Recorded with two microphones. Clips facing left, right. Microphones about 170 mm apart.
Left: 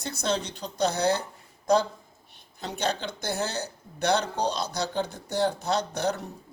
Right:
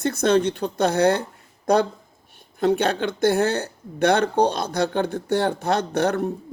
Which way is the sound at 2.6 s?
55° right (ahead or behind).